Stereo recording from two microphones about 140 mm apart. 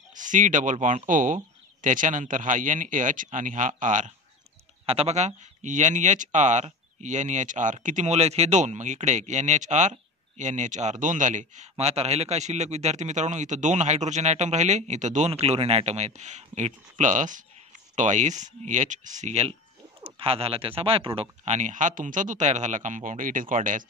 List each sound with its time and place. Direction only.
0.1 s speech: 65° right (ahead or behind)
4.8 s speech: 50° right (ahead or behind)
11.7 s a man's voice: 50° right (ahead or behind)
20.0 s speech: 40° right (ahead or behind)
21.5 s speech: 60° right (ahead or behind)